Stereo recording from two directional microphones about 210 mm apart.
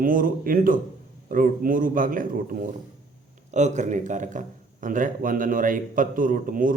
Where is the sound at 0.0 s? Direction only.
40° right (ahead or behind).